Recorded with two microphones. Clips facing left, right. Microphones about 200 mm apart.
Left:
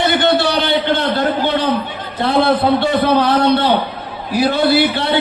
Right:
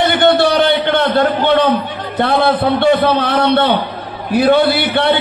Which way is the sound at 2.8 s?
60° right (ahead or behind).